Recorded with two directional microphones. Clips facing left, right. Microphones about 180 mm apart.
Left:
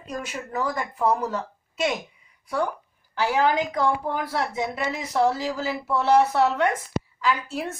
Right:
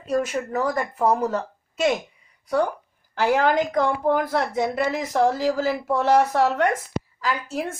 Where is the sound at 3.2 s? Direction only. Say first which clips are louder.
Right 3 dB; 50° right (ahead or behind).